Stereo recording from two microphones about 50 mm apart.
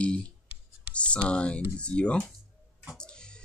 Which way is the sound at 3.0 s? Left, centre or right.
Centre.